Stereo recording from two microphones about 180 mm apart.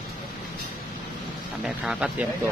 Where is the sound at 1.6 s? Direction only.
5° right (ahead or behind).